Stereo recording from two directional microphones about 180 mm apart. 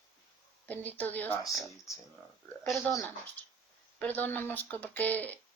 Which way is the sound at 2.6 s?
5° left (ahead or behind).